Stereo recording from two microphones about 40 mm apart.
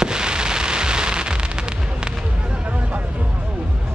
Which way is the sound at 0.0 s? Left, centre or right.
Centre.